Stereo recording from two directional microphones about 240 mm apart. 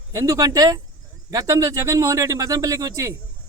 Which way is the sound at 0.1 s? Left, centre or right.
Centre.